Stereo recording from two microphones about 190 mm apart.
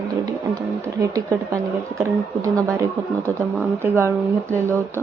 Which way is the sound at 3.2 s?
15° right (ahead or behind).